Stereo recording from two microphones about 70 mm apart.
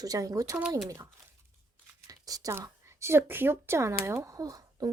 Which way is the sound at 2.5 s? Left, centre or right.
Right.